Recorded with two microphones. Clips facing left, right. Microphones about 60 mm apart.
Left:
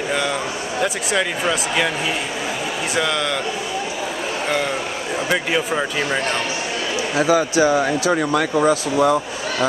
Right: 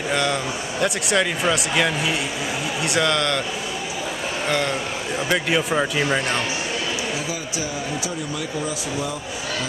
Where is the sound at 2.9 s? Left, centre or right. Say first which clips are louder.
Right 1 dB; centre.